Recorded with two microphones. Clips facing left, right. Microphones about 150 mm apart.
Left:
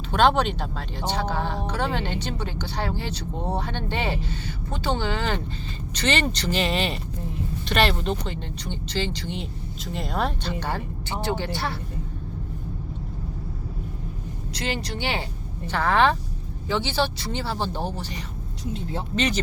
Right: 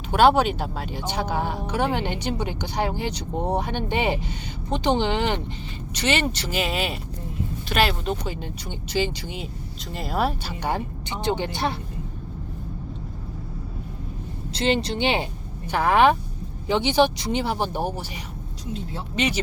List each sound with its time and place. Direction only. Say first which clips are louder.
0.1 s speech: right 3 dB; 10° right (ahead or behind)
14.5 s speech: right 7 dB; 25° right (ahead or behind); by 19.4 s 10° right (ahead or behind)